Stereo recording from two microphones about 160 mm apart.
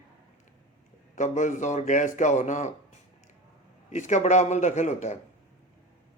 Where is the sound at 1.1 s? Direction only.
50° left (ahead or behind).